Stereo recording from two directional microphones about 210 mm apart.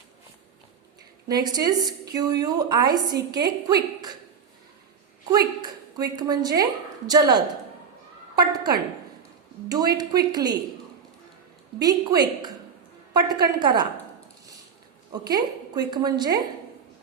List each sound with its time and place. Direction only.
1.3 s a woman's voice: 20° right (ahead or behind)
5.3 s a woman's voice: 20° right (ahead or behind)
11.8 s a woman's voice: 20° right (ahead or behind)
15.1 s a woman's voice: 20° right (ahead or behind)